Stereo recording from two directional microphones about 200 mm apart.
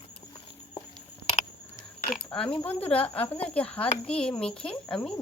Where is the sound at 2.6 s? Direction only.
5° left (ahead or behind).